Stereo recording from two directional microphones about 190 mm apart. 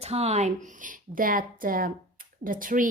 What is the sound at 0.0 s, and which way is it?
A woman's voice, 35° right (ahead or behind).